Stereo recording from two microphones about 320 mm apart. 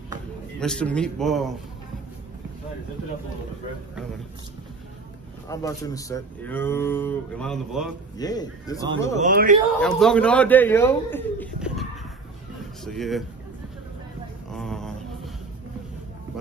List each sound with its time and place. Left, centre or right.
0.6 s a man's voice: centre
5.5 s speech: centre
8.2 s speech: centre
9.1 s a man's voice: right
9.8 s a man's voice: centre
12.8 s a man's voice: centre
14.5 s a sound: centre